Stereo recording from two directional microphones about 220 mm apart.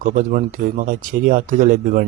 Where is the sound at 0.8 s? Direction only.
35° right (ahead or behind).